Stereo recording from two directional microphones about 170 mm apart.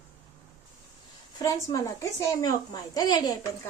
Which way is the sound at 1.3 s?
20° left (ahead or behind).